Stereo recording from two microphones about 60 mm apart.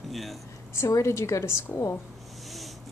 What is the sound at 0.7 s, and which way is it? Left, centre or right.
A woman's voice, left.